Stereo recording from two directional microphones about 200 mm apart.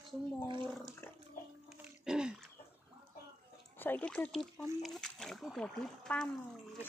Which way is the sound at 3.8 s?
10° left (ahead or behind).